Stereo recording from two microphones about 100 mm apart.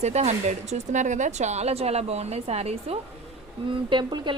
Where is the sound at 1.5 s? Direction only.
90° right.